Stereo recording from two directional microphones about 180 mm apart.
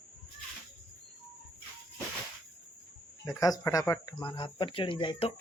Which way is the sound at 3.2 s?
20° left (ahead or behind).